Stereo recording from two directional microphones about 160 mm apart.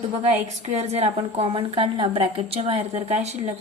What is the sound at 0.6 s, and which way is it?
A woman's voice, 40° right (ahead or behind).